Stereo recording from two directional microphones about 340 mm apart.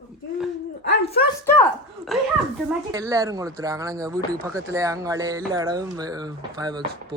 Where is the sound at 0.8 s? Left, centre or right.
Left.